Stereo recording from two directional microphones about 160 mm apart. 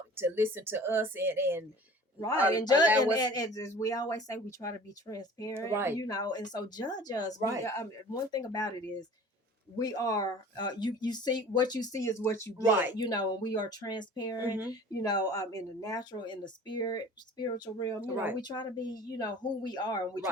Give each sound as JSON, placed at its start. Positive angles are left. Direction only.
{"t": 0.2, "sound": "speech", "side_deg": -15}
{"t": 2.5, "sound": "speech", "side_deg": 25}
{"t": 5.7, "sound": "speech", "side_deg": -15}
{"t": 6.0, "sound": "speech", "side_deg": 25}
{"t": 18.0, "sound": "speech", "side_deg": -10}
{"t": 18.4, "sound": "speech", "side_deg": 25}